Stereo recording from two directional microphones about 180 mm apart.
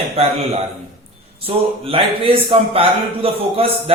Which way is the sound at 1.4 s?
30° right (ahead or behind).